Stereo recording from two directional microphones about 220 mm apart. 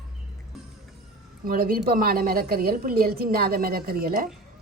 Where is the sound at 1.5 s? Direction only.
40° right (ahead or behind).